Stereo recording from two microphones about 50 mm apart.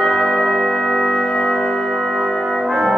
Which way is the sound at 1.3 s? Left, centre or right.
Centre.